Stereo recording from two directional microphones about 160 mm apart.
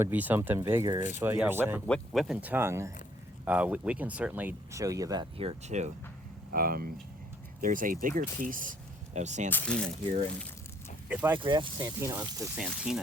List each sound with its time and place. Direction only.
0.0 s speech: 10° right (ahead or behind)
1.9 s speech: centre (ahead or behind); by 5.3 s 25° right (ahead or behind)
5.4 s speech: 40° right (ahead or behind)
6.5 s speech: 65° right (ahead or behind)
9.1 s speech: 45° right (ahead or behind)
9.5 s speech: 10° left (ahead or behind)
11.1 s speech: 10° right (ahead or behind)
11.3 s speech: 30° right (ahead or behind)
12.5 s speech: 5° right (ahead or behind)